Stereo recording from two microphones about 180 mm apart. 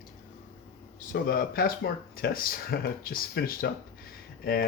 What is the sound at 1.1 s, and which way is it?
Speech, 55° left (ahead or behind).